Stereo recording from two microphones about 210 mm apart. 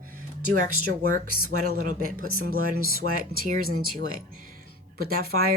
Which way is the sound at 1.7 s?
40° right (ahead or behind).